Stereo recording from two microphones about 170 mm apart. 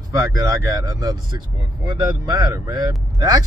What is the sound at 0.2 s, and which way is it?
Speech, 20° right (ahead or behind).